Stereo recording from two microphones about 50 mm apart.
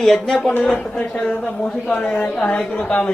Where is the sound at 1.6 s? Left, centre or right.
Centre.